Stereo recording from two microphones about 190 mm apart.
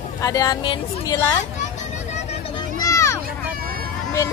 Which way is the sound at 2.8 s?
15° left (ahead or behind).